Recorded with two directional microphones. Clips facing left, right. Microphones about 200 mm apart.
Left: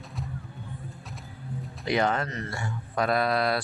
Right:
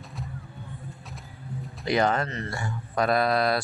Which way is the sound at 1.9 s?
40° right (ahead or behind).